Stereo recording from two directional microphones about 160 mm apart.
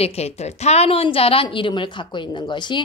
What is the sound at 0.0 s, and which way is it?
A woman's voice, 40° left (ahead or behind).